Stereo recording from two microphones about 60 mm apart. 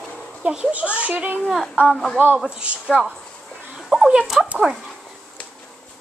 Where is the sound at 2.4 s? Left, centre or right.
Centre.